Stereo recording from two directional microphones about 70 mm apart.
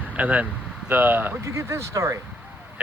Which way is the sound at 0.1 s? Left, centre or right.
Right.